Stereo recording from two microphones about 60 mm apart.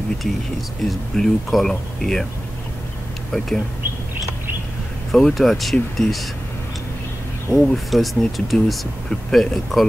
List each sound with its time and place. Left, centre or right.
0.8 s speech: centre
3.3 s speech: centre
5.1 s speech: centre
7.5 s speech: centre